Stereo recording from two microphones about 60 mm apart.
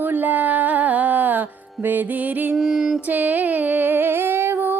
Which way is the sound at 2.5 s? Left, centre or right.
Centre.